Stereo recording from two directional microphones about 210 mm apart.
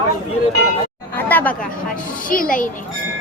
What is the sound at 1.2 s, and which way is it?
Chatter, 10° left (ahead or behind).